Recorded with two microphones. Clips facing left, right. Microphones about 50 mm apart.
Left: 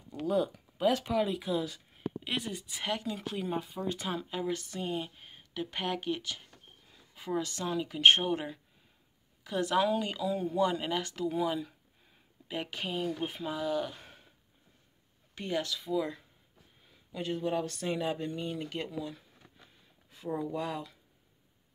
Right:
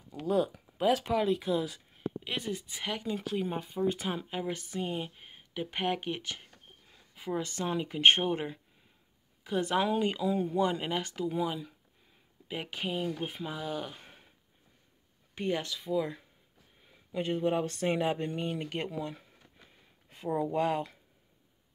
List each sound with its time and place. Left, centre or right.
0.2 s speech: centre; by 6.4 s right
6.9 s a sound: centre
7.4 s speech: right
11.1 s speech: centre
15.3 s speech: right
17.1 s speech: right
20.3 s speech: right